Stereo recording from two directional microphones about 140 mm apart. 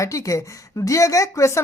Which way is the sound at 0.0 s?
20° left (ahead or behind).